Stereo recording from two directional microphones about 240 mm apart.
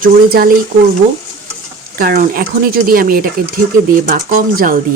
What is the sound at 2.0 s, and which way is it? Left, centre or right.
Speech, right.